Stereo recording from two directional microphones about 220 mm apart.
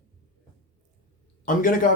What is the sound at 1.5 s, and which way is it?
Speech, 40° left (ahead or behind).